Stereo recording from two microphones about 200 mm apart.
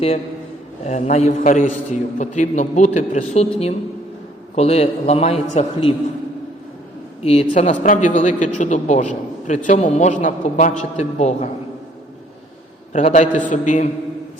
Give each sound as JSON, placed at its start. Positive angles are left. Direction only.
{"t": 0.9, "sound": "a man's voice", "side_deg": 35}
{"t": 4.5, "sound": "a man's voice", "side_deg": 30}
{"t": 7.2, "sound": "a man's voice", "side_deg": 30}
{"t": 12.9, "sound": "a man's voice", "side_deg": 35}